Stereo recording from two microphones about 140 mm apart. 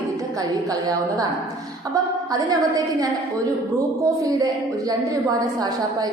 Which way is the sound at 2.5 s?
25° right (ahead or behind).